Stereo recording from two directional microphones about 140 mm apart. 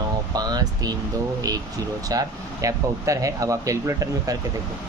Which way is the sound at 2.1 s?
25° right (ahead or behind).